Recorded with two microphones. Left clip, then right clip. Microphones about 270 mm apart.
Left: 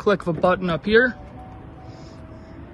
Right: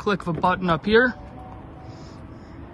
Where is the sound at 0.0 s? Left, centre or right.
Centre.